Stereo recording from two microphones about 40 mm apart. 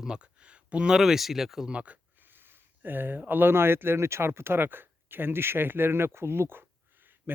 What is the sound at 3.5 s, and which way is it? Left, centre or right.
Speech, right.